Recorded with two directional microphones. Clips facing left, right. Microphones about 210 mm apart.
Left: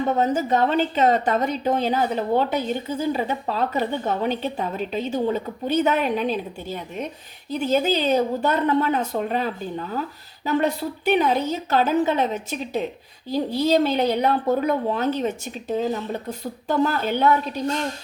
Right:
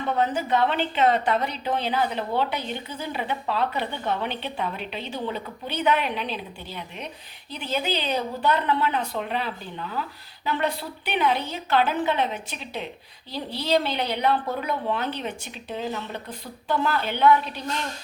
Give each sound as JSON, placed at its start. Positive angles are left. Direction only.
{"t": 0.0, "sound": "speech", "side_deg": 40}